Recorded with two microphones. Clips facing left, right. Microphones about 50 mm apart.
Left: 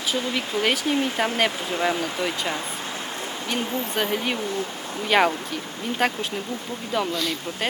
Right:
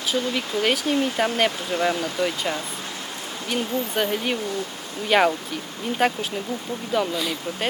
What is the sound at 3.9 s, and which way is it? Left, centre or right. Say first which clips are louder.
Speech: even; centre.